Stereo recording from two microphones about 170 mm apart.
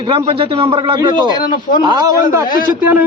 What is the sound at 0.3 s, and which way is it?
A man's voice, 30° right (ahead or behind).